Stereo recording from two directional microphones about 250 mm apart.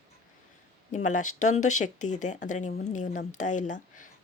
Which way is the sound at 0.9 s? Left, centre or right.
Left.